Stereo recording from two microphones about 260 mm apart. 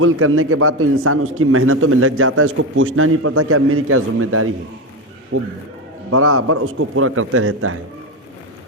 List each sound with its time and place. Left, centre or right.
0.0 s a man's voice: right